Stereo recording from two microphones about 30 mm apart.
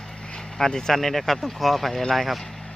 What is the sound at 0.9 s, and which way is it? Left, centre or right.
Speech, centre.